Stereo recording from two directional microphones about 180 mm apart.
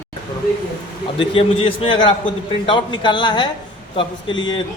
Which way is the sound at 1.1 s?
30° left (ahead or behind).